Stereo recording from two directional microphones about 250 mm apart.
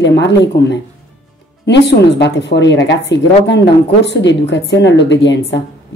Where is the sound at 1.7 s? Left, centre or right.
Left.